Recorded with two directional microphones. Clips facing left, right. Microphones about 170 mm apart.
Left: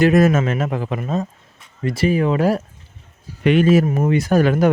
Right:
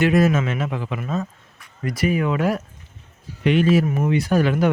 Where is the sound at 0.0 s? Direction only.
45° left (ahead or behind).